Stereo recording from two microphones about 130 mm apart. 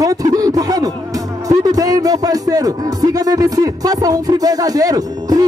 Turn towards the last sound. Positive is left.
turn(degrees=-30)  # may be behind; listen again after turning